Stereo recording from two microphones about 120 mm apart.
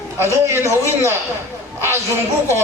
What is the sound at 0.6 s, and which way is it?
Speech, 20° right (ahead or behind).